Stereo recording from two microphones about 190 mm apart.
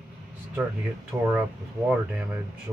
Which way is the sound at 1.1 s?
20° right (ahead or behind).